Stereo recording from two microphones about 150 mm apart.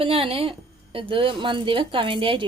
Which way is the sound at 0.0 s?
40° right (ahead or behind).